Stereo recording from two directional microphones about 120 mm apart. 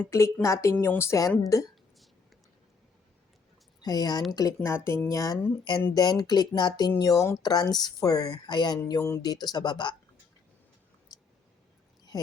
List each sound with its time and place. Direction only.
0.4 s speech: 25° left (ahead or behind)
3.8 s speech: 35° left (ahead or behind)
8.9 s speech: 25° left (ahead or behind)
9.2 s speech: 35° left (ahead or behind)